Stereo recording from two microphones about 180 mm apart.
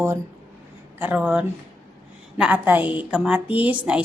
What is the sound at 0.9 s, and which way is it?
A woman's voice, 10° right (ahead or behind).